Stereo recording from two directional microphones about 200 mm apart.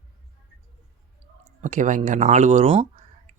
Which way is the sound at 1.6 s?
40° right (ahead or behind).